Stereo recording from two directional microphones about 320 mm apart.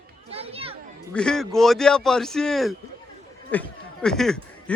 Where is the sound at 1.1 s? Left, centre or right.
Centre.